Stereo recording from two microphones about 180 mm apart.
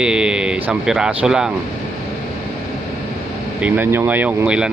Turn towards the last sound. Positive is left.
turn(degrees=-5)  # may be behind; listen again after turning